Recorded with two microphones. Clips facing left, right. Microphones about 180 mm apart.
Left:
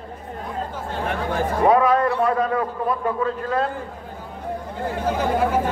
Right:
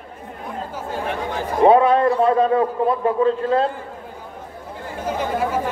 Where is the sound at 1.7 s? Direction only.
25° right (ahead or behind).